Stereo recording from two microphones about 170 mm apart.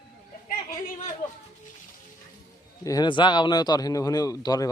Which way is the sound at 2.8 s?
20° left (ahead or behind).